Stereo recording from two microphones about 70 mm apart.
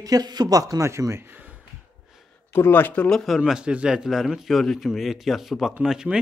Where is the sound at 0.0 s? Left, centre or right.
Right.